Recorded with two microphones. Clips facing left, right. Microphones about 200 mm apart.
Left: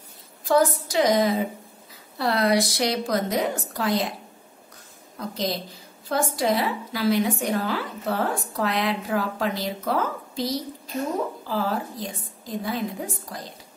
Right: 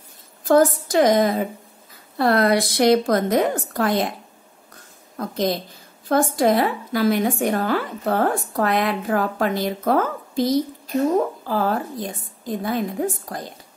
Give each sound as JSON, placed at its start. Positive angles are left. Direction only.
{"t": 0.5, "sound": "a woman's voice", "side_deg": -50}
{"t": 5.1, "sound": "a woman's voice", "side_deg": -50}